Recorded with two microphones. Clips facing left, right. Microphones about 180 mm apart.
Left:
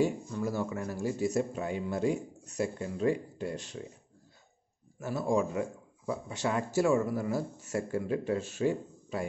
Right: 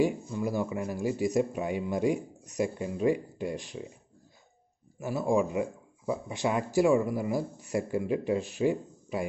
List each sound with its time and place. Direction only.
0.0 s speech: 15° right (ahead or behind)
5.0 s speech: 15° right (ahead or behind)